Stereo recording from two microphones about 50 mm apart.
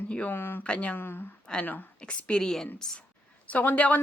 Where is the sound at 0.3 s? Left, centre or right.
Left.